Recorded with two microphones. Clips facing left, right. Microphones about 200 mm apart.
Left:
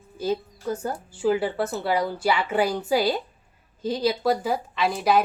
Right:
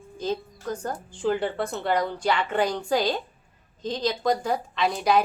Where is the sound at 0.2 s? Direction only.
10° left (ahead or behind).